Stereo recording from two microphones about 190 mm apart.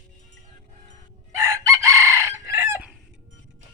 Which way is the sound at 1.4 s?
15° right (ahead or behind).